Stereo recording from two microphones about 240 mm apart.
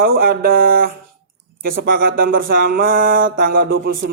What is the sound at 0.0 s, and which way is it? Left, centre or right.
A man's voice, right.